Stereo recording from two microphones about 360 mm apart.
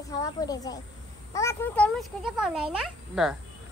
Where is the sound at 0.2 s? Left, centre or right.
Centre.